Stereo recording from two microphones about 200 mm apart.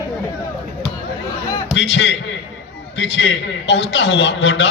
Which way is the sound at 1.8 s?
65° left (ahead or behind).